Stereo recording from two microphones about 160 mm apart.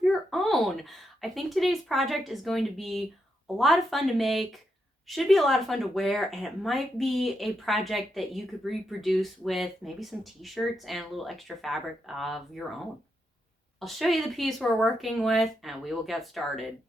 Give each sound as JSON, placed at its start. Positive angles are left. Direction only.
{"t": 0.1, "sound": "speech", "side_deg": 0}